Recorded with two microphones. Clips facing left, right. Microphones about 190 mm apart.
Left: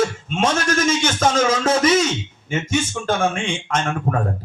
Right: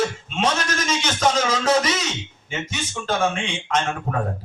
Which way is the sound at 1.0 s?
50° left (ahead or behind).